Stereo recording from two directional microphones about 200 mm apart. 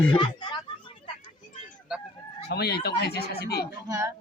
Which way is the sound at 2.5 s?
55° left (ahead or behind).